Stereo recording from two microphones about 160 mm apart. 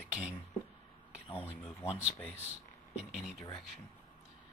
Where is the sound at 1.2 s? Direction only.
35° left (ahead or behind).